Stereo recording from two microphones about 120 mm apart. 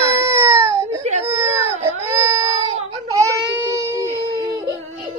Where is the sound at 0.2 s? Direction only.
20° right (ahead or behind).